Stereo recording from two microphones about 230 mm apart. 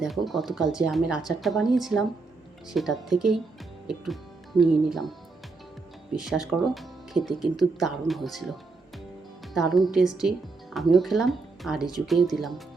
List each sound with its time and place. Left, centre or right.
0.0 s speech: centre
6.1 s speech: centre
9.6 s speech: centre